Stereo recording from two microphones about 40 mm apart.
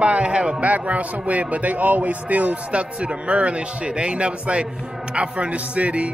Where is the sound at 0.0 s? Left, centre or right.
Right.